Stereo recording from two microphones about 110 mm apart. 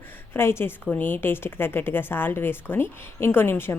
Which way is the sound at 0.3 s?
25° left (ahead or behind).